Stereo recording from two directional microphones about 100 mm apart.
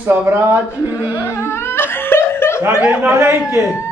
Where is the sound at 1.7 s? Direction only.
25° left (ahead or behind).